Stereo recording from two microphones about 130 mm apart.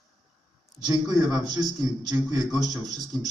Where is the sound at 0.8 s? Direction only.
30° right (ahead or behind).